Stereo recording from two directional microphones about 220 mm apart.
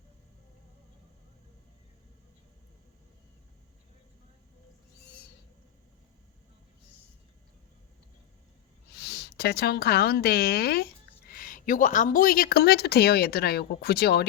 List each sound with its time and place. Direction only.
9.0 s a woman's voice: 45° left (ahead or behind)